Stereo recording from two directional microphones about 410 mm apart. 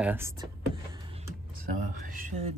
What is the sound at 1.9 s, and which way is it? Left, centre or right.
Speech, centre.